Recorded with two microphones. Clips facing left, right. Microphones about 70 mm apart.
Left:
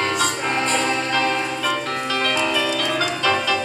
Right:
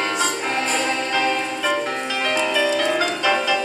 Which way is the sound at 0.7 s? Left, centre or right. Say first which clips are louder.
Left 1 dB; centre.